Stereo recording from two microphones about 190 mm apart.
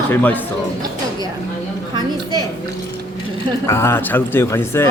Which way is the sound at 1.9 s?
20° right (ahead or behind).